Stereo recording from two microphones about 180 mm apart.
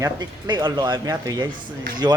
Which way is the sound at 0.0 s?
25° right (ahead or behind).